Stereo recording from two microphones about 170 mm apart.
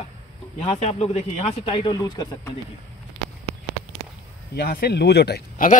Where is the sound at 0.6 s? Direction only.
40° left (ahead or behind); by 2.5 s 20° left (ahead or behind).